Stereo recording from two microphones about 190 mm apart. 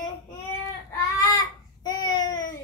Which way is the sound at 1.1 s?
20° left (ahead or behind).